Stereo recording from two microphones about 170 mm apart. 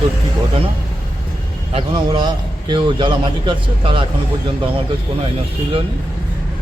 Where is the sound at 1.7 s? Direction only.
25° right (ahead or behind).